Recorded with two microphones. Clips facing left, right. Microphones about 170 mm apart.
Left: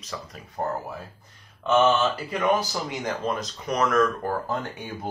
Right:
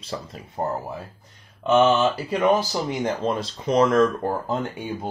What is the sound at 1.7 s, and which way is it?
Speech, 10° right (ahead or behind).